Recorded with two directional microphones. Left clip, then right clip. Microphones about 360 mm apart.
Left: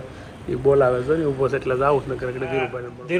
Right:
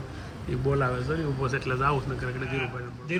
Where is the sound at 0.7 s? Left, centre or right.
Left.